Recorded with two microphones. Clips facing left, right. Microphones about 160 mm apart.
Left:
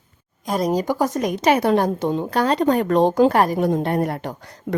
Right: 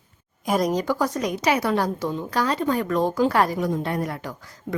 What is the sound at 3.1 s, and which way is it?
A woman's voice, 45° left (ahead or behind).